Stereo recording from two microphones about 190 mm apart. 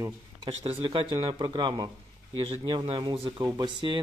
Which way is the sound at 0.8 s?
25° right (ahead or behind).